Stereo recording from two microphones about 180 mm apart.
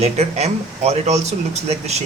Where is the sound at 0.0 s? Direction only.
35° right (ahead or behind).